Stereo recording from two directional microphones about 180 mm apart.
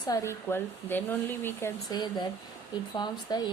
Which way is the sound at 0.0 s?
20° left (ahead or behind).